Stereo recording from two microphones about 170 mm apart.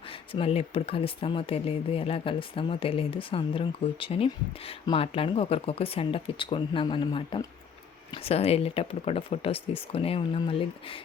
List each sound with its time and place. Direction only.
0.3 s speech: 35° left (ahead or behind)